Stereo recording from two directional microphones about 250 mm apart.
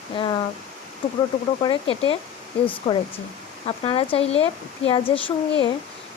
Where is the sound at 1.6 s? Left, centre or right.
Left.